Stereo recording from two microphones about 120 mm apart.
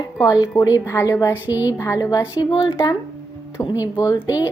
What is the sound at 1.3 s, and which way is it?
Speech, 15° right (ahead or behind).